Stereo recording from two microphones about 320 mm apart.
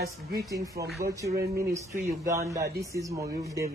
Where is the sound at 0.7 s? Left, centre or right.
Right.